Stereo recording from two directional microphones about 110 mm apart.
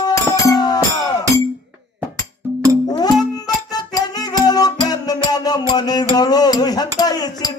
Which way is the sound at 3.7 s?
35° left (ahead or behind).